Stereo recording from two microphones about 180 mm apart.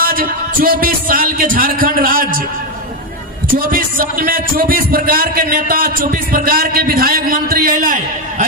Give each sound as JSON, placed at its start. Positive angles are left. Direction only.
{"t": 0.0, "sound": "speech", "side_deg": -55}
{"t": 3.5, "sound": "speech", "side_deg": -50}